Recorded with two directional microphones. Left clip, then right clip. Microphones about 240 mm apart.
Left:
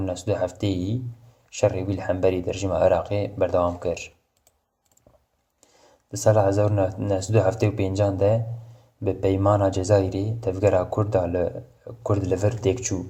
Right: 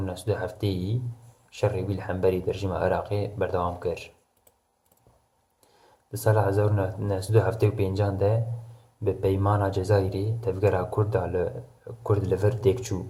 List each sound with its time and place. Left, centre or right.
0.0 s speech: centre
6.1 s speech: left